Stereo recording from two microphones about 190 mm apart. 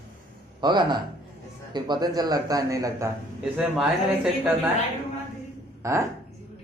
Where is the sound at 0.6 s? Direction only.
25° right (ahead or behind).